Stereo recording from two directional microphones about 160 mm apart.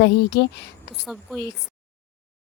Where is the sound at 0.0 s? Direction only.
90° left.